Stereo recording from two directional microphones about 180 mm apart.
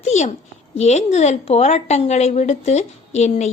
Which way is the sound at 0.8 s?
40° left (ahead or behind).